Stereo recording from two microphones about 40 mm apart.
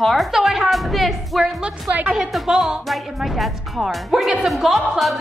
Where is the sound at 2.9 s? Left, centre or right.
Centre.